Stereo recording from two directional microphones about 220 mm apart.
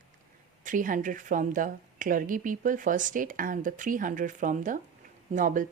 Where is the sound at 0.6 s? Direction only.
35° right (ahead or behind).